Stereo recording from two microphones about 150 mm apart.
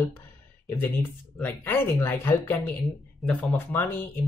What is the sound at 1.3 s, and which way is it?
Speech, 10° left (ahead or behind).